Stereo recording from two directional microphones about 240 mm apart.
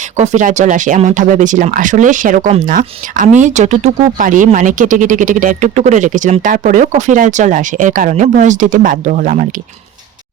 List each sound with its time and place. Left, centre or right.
0.2 s speech: right